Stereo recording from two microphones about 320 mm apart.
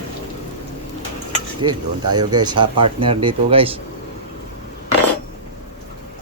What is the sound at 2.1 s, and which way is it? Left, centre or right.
Speech, centre.